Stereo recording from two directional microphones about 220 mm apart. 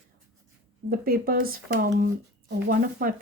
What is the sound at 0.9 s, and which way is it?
Speech, 40° right (ahead or behind).